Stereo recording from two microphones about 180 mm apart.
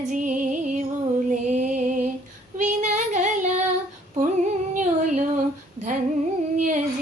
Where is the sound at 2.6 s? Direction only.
40° right (ahead or behind).